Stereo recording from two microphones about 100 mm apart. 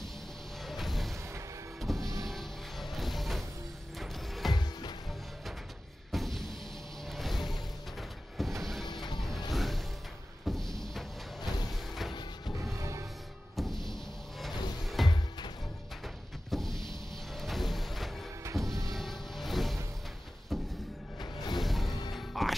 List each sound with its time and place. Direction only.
0.7 s a sound: centre (ahead or behind)
1.8 s music: centre (ahead or behind)
6.1 s music: 5° left (ahead or behind)
8.4 s vehicle: centre (ahead or behind)
8.8 s music: 45° left (ahead or behind)
9.5 s music: centre (ahead or behind)
12.1 s music: 45° left (ahead or behind)
13.6 s music: 5° left (ahead or behind)
15.0 s music: centre (ahead or behind)
16.4 s vehicle: 5° left (ahead or behind)
18.6 s music: centre (ahead or behind)
21.2 s music: 45° left (ahead or behind)
21.5 s music: centre (ahead or behind)